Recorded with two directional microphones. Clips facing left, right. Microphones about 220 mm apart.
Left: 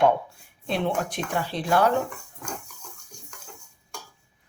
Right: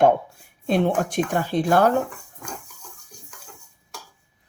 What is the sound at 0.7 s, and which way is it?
Speech, 45° right (ahead or behind).